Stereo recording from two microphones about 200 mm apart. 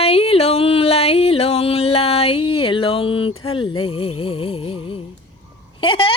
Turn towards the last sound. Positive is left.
turn(degrees=25)  # may be behind; listen again after turning